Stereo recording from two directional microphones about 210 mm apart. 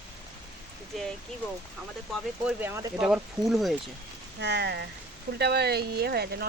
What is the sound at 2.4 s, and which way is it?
Speech, 5° right (ahead or behind).